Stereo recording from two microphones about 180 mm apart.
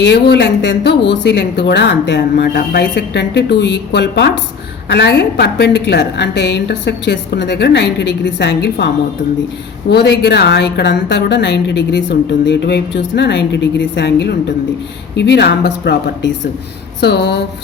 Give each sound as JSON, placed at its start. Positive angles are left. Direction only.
{"t": 0.0, "sound": "a woman's voice", "side_deg": 70}
{"t": 9.9, "sound": "a woman's voice", "side_deg": 70}
{"t": 17.0, "sound": "a woman's voice", "side_deg": 65}